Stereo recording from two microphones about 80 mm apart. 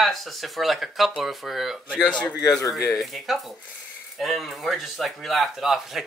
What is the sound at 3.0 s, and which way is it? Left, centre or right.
Speech, centre.